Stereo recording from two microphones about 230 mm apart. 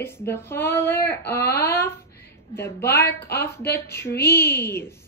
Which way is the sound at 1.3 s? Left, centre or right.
Left.